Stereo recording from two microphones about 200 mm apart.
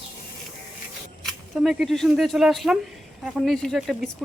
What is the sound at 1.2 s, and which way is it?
Speech, centre (ahead or behind).